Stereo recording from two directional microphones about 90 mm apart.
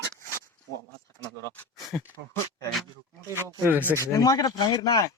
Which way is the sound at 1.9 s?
10° left (ahead or behind).